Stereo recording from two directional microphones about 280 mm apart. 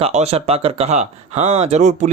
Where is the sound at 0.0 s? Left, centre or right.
Right.